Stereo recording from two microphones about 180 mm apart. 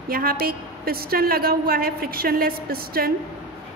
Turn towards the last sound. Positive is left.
turn(degrees=-55)  # may be behind; listen again after turning